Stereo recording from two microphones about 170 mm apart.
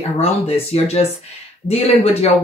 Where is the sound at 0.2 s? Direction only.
40° left (ahead or behind).